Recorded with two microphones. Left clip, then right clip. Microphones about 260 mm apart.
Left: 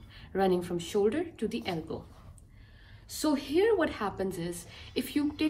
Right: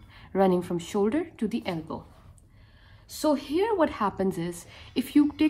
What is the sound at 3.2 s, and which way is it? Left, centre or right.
A woman's voice, centre.